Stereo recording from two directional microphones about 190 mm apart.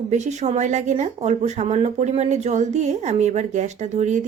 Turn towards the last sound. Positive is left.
turn(degrees=-40)  # may be behind; listen again after turning